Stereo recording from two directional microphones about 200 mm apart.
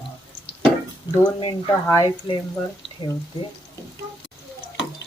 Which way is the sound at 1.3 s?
20° left (ahead or behind).